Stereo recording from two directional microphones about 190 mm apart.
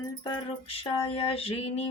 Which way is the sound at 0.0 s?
25° left (ahead or behind).